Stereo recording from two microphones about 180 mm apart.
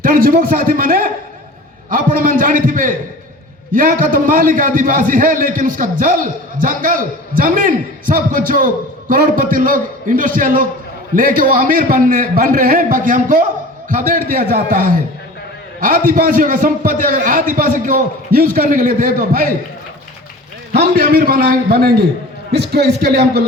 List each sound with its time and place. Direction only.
0.0 s a man's voice: 50° right (ahead or behind)
20.7 s a man's voice: 60° right (ahead or behind)